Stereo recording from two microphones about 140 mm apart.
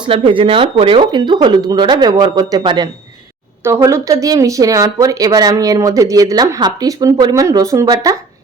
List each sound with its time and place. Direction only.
0.0 s speech: 40° right (ahead or behind)